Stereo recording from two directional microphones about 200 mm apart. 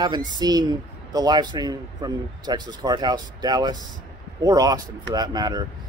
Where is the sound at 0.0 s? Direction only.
20° right (ahead or behind).